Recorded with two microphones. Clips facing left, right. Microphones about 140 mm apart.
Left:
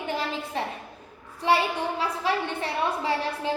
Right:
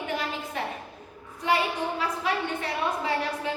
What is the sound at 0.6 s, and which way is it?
A woman's voice, 30° left (ahead or behind).